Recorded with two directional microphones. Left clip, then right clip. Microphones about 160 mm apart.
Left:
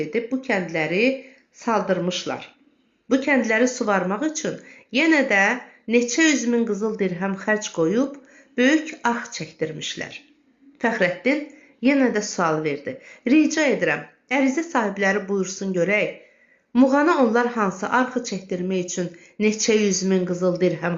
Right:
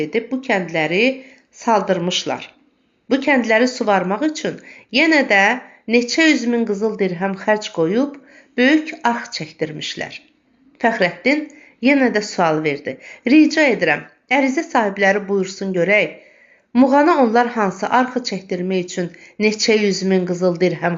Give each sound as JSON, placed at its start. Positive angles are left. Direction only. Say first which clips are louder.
{"t": 0.0, "sound": "speech", "louder": "right 4 dB", "side_deg": -35}